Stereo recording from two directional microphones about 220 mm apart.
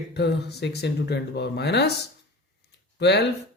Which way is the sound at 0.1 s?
50° left (ahead or behind).